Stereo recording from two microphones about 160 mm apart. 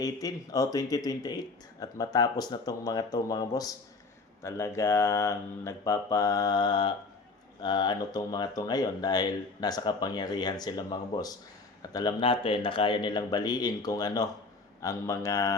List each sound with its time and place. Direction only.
0.0 s speech: 20° left (ahead or behind)
12.2 s speech: 35° left (ahead or behind)